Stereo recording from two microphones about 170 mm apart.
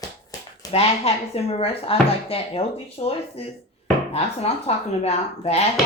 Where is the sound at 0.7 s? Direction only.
35° left (ahead or behind).